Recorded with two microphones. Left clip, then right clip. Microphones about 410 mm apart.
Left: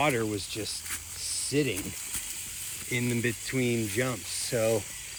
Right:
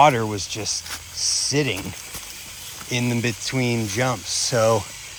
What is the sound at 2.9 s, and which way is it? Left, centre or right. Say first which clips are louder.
Speech: right 6 dB; right.